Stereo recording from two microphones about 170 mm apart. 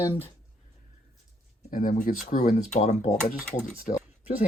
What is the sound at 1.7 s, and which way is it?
Speech, 55° left (ahead or behind).